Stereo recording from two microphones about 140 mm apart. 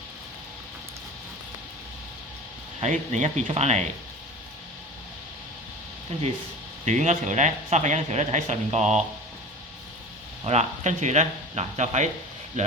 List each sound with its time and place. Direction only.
2.8 s speech: 55° right (ahead or behind)
6.8 s speech: 55° right (ahead or behind)
10.4 s speech: 50° right (ahead or behind)